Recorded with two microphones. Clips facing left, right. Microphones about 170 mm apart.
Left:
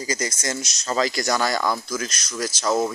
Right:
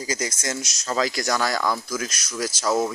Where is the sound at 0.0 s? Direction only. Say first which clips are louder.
Left 1 dB; 5° right (ahead or behind).